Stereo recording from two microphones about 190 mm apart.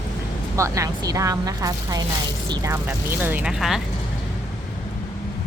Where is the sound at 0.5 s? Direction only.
15° right (ahead or behind).